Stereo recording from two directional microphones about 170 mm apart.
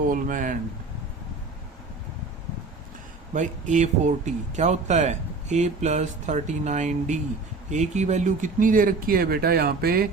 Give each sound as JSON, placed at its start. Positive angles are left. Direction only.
{"t": 0.1, "sound": "a man's voice", "side_deg": -50}
{"t": 3.3, "sound": "a man's voice", "side_deg": -45}